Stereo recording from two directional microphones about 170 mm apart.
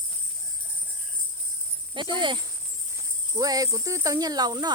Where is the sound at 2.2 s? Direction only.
30° right (ahead or behind).